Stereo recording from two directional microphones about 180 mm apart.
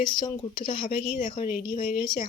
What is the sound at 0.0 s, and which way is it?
Speech, 25° left (ahead or behind).